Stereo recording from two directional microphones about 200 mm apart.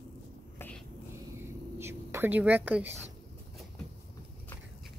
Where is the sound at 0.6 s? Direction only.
5° left (ahead or behind).